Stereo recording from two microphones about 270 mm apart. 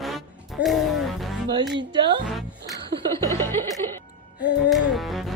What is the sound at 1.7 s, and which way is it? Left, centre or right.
Speech, centre.